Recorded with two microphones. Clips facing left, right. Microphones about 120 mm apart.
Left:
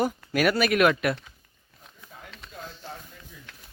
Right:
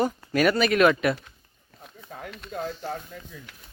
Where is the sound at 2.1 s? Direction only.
60° right (ahead or behind).